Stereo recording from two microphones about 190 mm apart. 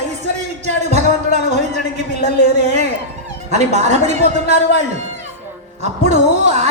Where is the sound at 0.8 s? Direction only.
35° right (ahead or behind).